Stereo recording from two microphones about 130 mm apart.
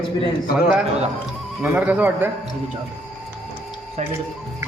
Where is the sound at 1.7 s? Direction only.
10° right (ahead or behind).